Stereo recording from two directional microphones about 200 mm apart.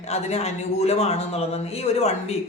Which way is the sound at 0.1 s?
35° left (ahead or behind).